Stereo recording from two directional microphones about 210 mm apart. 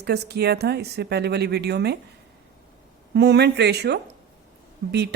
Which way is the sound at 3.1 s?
50° right (ahead or behind).